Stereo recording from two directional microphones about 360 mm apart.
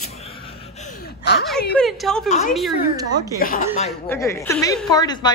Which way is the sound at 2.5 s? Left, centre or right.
Centre.